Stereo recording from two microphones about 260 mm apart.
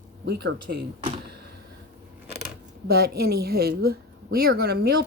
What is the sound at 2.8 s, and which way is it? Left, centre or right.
A woman's voice, right.